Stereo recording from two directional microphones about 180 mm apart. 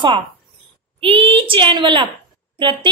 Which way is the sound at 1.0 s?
30° right (ahead or behind).